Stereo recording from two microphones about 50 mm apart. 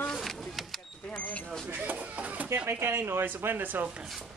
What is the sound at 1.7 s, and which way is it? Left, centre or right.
Speech, right.